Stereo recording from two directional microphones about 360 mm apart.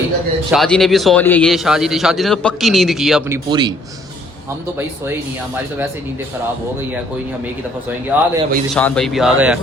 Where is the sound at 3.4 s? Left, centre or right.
Centre.